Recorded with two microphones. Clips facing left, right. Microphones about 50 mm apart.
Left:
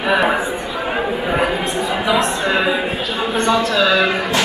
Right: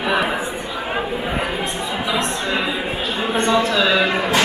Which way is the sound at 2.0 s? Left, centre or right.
Centre.